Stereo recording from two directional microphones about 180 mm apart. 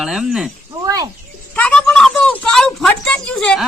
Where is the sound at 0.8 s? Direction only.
20° right (ahead or behind).